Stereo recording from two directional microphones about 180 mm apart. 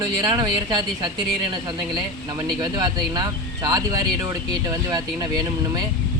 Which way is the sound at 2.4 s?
20° right (ahead or behind).